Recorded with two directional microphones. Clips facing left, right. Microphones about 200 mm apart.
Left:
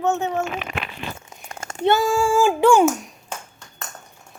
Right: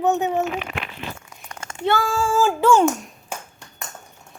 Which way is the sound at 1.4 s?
35° left (ahead or behind).